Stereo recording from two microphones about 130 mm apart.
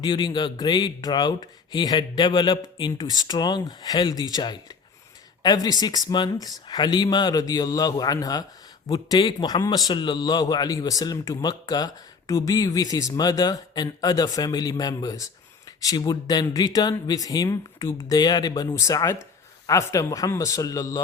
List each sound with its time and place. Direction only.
0.0 s speech: 35° left (ahead or behind)